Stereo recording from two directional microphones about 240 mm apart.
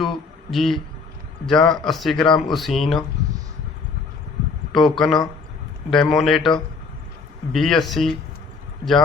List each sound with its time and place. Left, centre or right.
0.5 s a man's voice: centre
3.2 s a sound: centre
4.7 s a man's voice: centre
7.5 s a man's voice: centre